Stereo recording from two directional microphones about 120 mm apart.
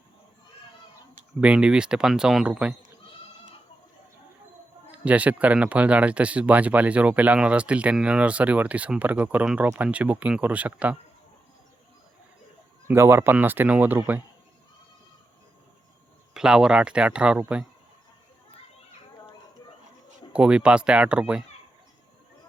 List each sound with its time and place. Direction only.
1.4 s speech: 10° right (ahead or behind)
4.9 s speech: 10° right (ahead or behind)
12.9 s speech: 20° right (ahead or behind)
16.3 s speech: 5° right (ahead or behind)
20.3 s speech: 10° right (ahead or behind)